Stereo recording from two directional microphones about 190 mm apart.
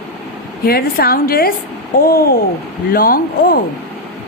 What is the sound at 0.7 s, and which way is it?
A woman's voice, 55° left (ahead or behind).